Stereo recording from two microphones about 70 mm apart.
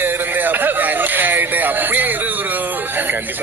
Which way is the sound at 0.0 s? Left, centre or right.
Right.